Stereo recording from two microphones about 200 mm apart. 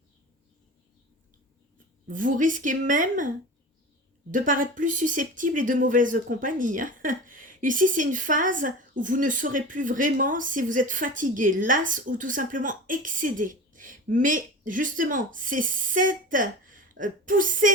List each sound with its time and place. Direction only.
2.0 s speech: 40° right (ahead or behind)